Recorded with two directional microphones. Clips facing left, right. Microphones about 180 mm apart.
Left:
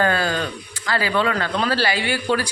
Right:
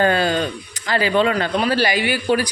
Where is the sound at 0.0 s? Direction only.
20° right (ahead or behind).